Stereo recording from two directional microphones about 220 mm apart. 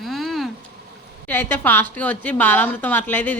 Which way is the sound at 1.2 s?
10° left (ahead or behind).